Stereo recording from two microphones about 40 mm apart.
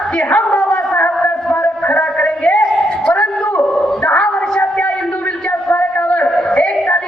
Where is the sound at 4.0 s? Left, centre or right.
Left.